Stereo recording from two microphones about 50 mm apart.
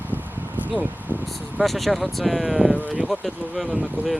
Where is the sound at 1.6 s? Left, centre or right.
Centre.